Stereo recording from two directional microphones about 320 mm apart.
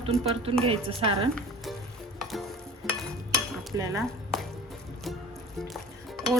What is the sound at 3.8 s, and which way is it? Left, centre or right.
Dishes, centre.